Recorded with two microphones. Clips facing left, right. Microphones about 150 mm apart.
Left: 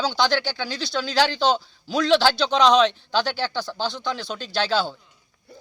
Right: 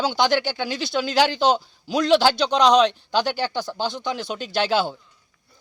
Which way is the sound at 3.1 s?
15° right (ahead or behind).